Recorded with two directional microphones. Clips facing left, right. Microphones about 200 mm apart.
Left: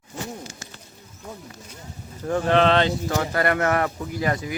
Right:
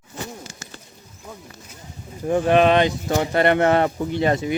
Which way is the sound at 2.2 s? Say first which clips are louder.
Right 3 dB; 15° right (ahead or behind).